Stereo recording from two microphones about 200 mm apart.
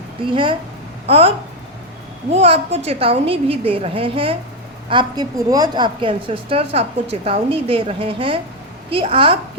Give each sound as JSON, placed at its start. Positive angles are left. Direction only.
{"t": 0.2, "sound": "a woman's voice", "side_deg": -25}
{"t": 2.3, "sound": "a woman's voice", "side_deg": -30}